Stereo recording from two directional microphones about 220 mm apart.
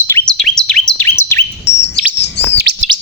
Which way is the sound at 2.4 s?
50° left (ahead or behind).